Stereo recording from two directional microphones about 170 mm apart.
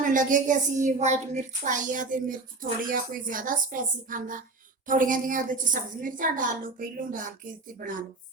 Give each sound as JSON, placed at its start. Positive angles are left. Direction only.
{"t": 0.0, "sound": "a woman's voice", "side_deg": -50}